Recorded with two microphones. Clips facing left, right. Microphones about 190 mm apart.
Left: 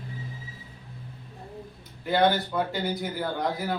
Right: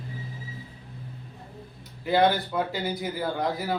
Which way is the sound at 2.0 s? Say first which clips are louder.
Right 1 dB; 5° right (ahead or behind).